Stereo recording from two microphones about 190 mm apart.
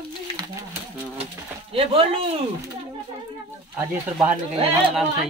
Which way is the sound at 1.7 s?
30° right (ahead or behind).